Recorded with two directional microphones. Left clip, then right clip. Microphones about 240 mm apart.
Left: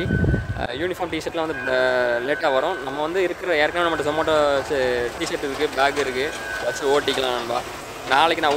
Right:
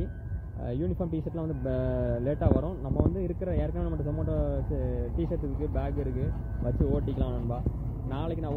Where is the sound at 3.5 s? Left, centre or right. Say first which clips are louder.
Left 15 dB; left.